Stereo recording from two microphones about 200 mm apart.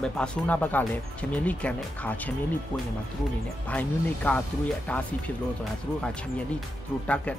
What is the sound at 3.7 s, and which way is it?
Speech, 5° left (ahead or behind).